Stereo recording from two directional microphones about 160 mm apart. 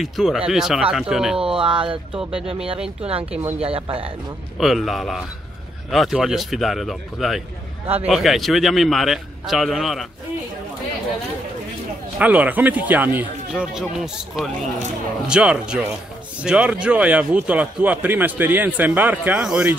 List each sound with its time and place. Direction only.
0.0 s a man's voice: centre (ahead or behind)
1.6 s speech: 35° right (ahead or behind)
2.1 s a man's voice: 5° right (ahead or behind)
3.0 s speech: 35° right (ahead or behind)
3.3 s speech: 10° right (ahead or behind)
3.6 s speech: 35° right (ahead or behind)
4.6 s a man's voice: centre (ahead or behind)
7.8 s a man's voice: 40° right (ahead or behind)
8.1 s a man's voice: centre (ahead or behind)
12.2 s a man's voice: 10° right (ahead or behind)